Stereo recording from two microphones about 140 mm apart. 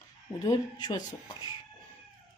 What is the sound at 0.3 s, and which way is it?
Speech, 30° left (ahead or behind).